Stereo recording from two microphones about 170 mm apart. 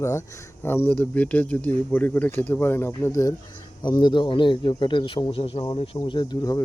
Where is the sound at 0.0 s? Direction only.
15° left (ahead or behind).